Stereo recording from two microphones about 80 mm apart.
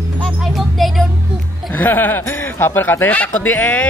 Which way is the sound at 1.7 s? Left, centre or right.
Left.